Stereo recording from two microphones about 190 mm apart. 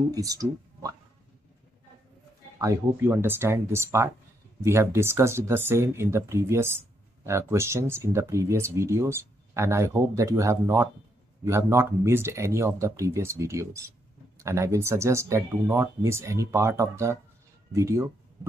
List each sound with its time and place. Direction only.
0.1 s speech: 20° right (ahead or behind)
2.6 s speech: 15° right (ahead or behind)